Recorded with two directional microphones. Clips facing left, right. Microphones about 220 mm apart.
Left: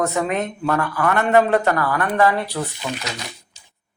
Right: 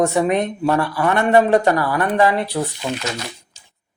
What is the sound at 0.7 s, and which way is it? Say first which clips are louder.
Speech: right 2 dB; 30° right (ahead or behind).